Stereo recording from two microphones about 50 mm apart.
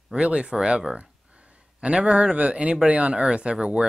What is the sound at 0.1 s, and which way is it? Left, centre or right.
A man's voice, centre.